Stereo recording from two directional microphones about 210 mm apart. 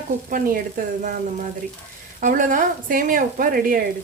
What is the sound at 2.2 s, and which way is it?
A woman's voice, 40° right (ahead or behind).